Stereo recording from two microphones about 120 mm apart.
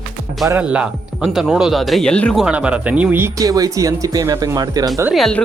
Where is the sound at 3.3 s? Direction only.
30° right (ahead or behind).